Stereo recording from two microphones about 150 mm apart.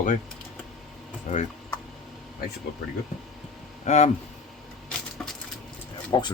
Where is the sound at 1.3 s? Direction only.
55° left (ahead or behind).